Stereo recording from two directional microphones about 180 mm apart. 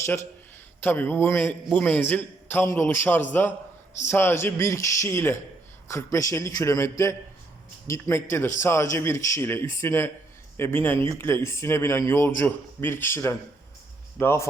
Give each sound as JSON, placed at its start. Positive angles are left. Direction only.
{"t": 0.0, "sound": "a man's voice", "side_deg": 15}